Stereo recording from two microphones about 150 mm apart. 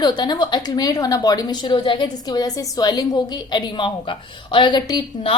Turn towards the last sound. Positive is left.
turn(degrees=35)  # may be behind; listen again after turning